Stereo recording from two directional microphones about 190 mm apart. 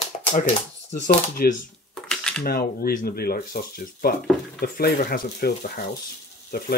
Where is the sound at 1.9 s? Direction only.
5° left (ahead or behind).